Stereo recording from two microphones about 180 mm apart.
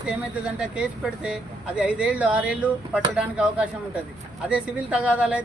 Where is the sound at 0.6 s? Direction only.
5° right (ahead or behind).